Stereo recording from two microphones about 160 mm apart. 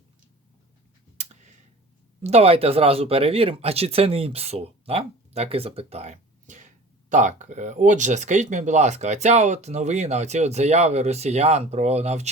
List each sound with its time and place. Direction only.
2.2 s speech: 40° right (ahead or behind)